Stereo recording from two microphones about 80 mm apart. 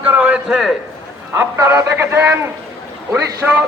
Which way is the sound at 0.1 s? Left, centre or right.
Centre.